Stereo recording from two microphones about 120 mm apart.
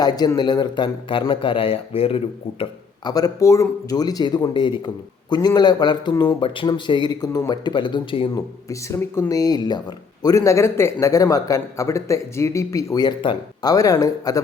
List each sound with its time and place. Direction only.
0.3 s speech: 40° left (ahead or behind)
3.0 s speech: 30° left (ahead or behind)
8.4 s speech: 25° left (ahead or behind)